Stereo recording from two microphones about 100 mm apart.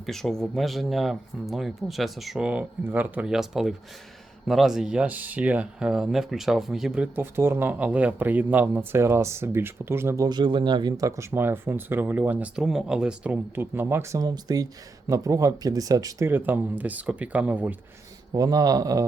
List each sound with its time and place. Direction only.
0.0 s speech: 5° left (ahead or behind); by 3.2 s 15° right (ahead or behind)
3.2 s speech: 5° right (ahead or behind)
7.2 s speech: 25° right (ahead or behind)
10.2 s speech: 50° right (ahead or behind)
11.3 s speech: 20° right (ahead or behind)
12.6 s speech: 5° right (ahead or behind); by 14.3 s 30° right (ahead or behind)
14.3 s speech: 40° right (ahead or behind)
16.2 s speech: 20° right (ahead or behind)
18.3 s speech: 40° right (ahead or behind)